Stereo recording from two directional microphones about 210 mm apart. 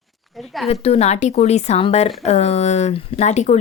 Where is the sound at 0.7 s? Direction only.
30° left (ahead or behind).